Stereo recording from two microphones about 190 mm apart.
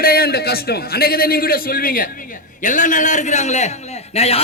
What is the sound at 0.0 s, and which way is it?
A man's voice, 55° left (ahead or behind).